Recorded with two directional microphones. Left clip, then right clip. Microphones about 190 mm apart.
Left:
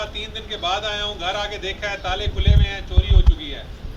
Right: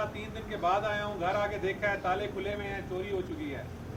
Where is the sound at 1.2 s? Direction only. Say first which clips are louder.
Left 5 dB; 10° right (ahead or behind).